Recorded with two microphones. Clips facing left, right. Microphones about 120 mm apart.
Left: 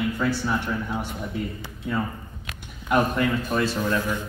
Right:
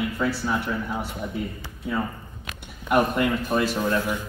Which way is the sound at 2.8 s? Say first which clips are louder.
Right 1 dB; 5° right (ahead or behind).